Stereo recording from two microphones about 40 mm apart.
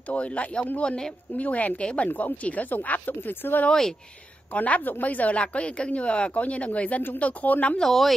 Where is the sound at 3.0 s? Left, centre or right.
Left.